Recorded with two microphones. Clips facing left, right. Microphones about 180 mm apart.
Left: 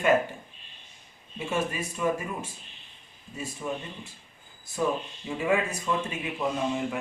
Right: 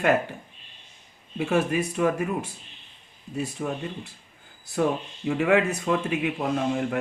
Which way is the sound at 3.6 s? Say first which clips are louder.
Right 1 dB; 55° right (ahead or behind).